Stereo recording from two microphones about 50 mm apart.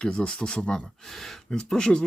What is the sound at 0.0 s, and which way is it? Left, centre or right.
Speech, centre.